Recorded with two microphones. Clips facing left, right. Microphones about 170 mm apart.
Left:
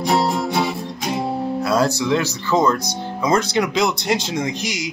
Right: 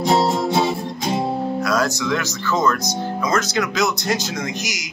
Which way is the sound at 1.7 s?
30° left (ahead or behind).